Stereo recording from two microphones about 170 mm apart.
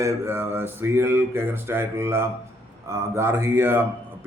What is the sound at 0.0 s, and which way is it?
A man's voice, 15° right (ahead or behind).